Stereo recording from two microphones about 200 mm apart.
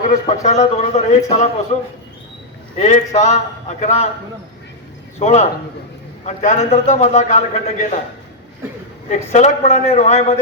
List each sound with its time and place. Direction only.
0.1 s a man's voice: 35° left (ahead or behind)
2.7 s a man's voice: 35° left (ahead or behind)
5.2 s a man's voice: 35° left (ahead or behind)
9.3 s a man's voice: 35° left (ahead or behind)